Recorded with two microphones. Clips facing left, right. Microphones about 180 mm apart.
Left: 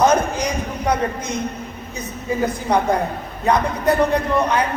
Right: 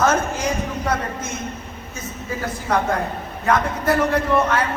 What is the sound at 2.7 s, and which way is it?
A woman's voice, 20° left (ahead or behind).